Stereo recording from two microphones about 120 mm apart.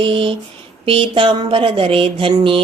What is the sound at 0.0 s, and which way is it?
Speech, 45° right (ahead or behind).